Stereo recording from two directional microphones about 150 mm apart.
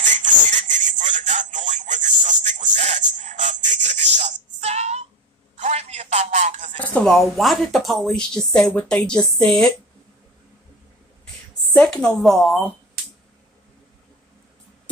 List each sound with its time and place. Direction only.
0.0 s a sound: 55° right (ahead or behind)
6.8 s speech: 10° left (ahead or behind)
11.7 s speech: 5° left (ahead or behind)